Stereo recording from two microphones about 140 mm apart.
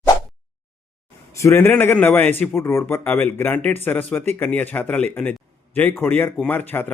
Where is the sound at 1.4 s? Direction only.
20° left (ahead or behind).